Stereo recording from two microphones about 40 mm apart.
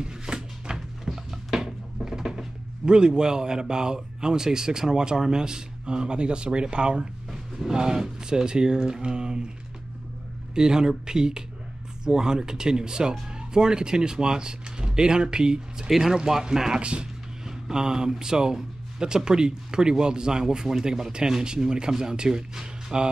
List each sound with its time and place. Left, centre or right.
0.0 s a sound: right
0.7 s music: centre
2.8 s speech: right
7.2 s a sound: centre
7.7 s speech: centre
10.5 s speech: centre
16.8 s speech: right
17.5 s speech: centre